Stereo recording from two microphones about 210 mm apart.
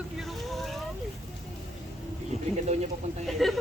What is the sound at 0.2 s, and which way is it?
Boat, centre (ahead or behind).